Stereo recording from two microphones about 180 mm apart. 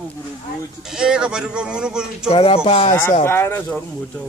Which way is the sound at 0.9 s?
5° right (ahead or behind).